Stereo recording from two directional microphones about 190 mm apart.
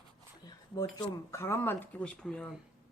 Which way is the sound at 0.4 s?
20° left (ahead or behind).